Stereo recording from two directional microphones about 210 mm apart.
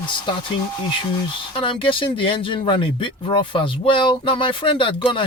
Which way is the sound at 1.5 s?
25° left (ahead or behind).